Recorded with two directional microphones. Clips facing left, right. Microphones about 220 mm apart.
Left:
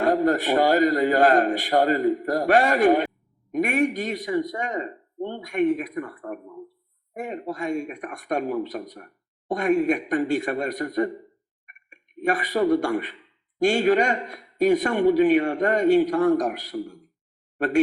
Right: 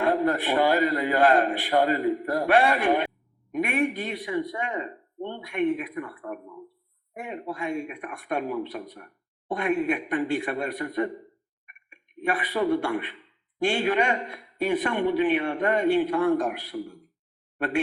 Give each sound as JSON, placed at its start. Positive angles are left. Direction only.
{"t": 0.0, "sound": "speech", "side_deg": 40}